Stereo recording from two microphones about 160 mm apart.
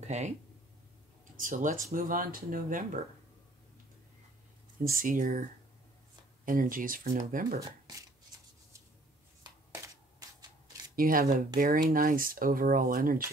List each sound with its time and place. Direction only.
0.0 s speech: 45° right (ahead or behind)
1.3 s speech: 60° right (ahead or behind)
4.8 s speech: 60° right (ahead or behind)
6.4 s speech: 60° right (ahead or behind)
11.0 s speech: 60° right (ahead or behind)